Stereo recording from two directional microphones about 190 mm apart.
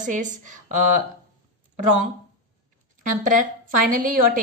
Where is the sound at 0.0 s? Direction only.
40° right (ahead or behind).